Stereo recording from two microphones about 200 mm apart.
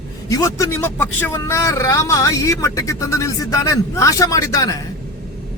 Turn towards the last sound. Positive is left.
turn(degrees=15)  # may be behind; listen again after turning